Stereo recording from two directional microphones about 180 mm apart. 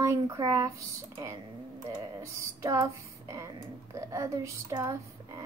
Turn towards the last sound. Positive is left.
turn(degrees=-15)  # may be behind; listen again after turning